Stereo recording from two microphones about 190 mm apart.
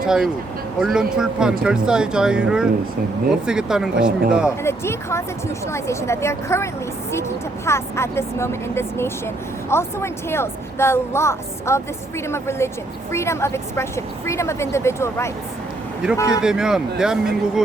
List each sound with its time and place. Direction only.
0.0 s speech: 5° right (ahead or behind)
4.6 s a woman's voice: 15° left (ahead or behind)
16.4 s speech: 5° right (ahead or behind)